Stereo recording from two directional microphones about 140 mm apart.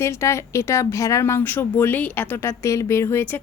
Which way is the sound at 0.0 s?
20° left (ahead or behind).